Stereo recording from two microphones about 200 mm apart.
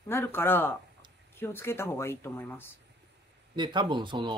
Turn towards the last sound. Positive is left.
turn(degrees=-25)  # may be behind; listen again after turning